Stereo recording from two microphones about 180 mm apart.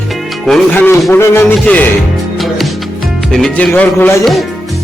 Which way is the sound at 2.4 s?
Centre (ahead or behind).